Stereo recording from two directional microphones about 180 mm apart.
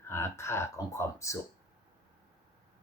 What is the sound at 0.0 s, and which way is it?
Speech, 15° left (ahead or behind).